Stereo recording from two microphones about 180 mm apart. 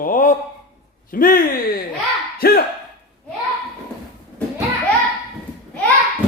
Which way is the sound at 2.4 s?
55° left (ahead or behind).